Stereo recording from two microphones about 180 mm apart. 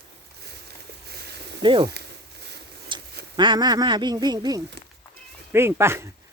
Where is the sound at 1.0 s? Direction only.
65° right (ahead or behind).